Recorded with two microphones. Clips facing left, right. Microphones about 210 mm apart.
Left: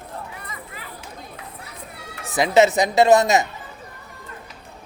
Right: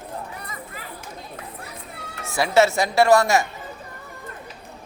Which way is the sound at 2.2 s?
20° left (ahead or behind).